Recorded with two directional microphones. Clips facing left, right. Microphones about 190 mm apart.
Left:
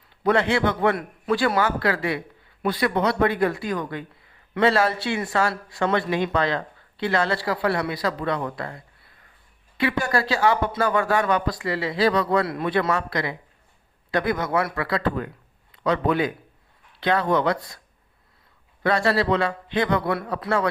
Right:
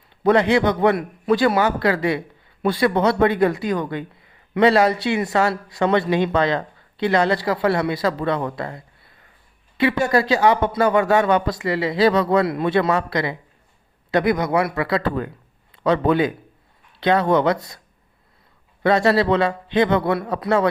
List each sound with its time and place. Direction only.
0.2 s a man's voice: 20° right (ahead or behind)
18.8 s speech: 20° right (ahead or behind)